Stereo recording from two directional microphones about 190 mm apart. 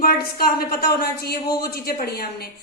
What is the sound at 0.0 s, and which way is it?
A woman's voice, 50° left (ahead or behind).